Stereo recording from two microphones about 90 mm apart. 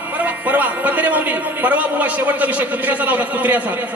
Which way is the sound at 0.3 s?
15° right (ahead or behind).